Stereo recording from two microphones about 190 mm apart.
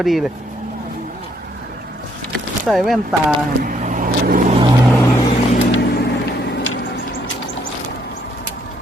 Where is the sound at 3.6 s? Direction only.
45° right (ahead or behind).